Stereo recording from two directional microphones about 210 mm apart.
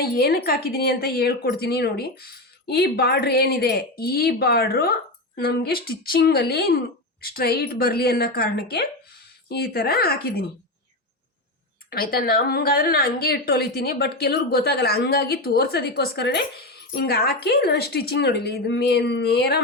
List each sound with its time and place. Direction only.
0.0 s a woman's voice: 45° left (ahead or behind)
11.9 s a woman's voice: 45° left (ahead or behind)